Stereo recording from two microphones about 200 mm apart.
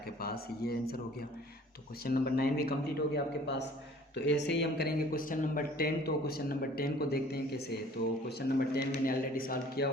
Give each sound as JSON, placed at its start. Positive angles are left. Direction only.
{"t": 0.2, "sound": "speech", "side_deg": 50}
{"t": 2.0, "sound": "a man's voice", "side_deg": 50}